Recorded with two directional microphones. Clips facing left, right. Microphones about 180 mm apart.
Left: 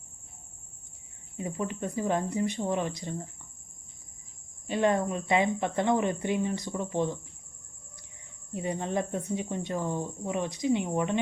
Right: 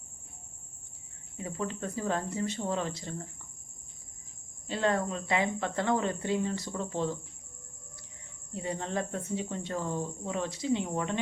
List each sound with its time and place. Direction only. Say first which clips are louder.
1.4 s speech: left 2 dB; 20° left (ahead or behind)
4.6 s speech: left 3 dB; 15° left (ahead or behind)
8.5 s speech: left 3 dB; 15° left (ahead or behind)